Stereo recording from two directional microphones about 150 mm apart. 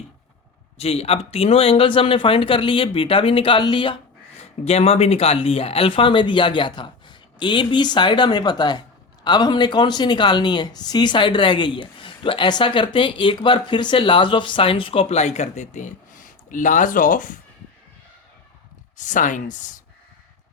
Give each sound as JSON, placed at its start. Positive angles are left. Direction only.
{"t": 0.8, "sound": "speech", "side_deg": 40}
{"t": 4.6, "sound": "speech", "side_deg": 45}
{"t": 18.9, "sound": "speech", "side_deg": 55}